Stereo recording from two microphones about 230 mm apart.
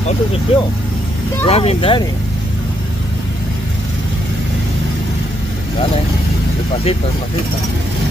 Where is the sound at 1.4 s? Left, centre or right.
Left.